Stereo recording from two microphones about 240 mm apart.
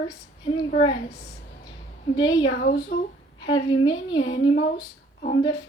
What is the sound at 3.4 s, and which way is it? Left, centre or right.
Speech, centre.